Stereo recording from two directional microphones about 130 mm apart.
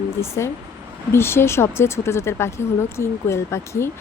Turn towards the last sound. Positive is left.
turn(degrees=20)  # may be behind; listen again after turning